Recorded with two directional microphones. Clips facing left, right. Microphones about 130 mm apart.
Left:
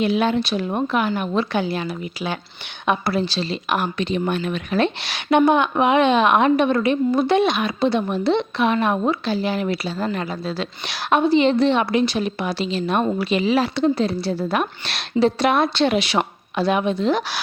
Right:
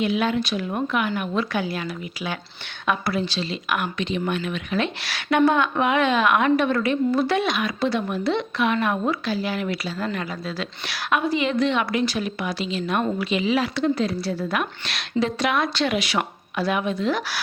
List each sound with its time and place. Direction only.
0.0 s a woman's voice: 30° left (ahead or behind)
3.2 s speech: 35° left (ahead or behind)
5.0 s a woman's voice: 20° left (ahead or behind)